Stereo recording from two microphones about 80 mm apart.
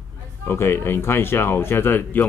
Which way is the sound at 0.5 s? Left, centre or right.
Left.